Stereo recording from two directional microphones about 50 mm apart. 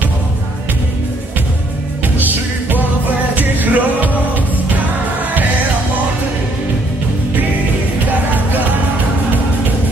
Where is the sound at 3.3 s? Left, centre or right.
Right.